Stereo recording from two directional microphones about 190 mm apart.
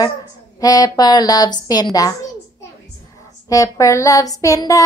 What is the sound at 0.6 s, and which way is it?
Speech, 20° left (ahead or behind).